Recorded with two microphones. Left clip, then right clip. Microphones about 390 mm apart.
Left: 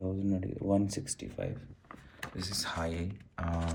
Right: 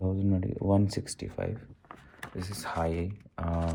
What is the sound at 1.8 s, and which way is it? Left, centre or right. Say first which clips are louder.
Speech: left 1 dB; centre.